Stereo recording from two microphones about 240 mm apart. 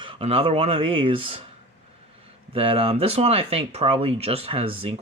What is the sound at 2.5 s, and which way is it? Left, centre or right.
Speech, right.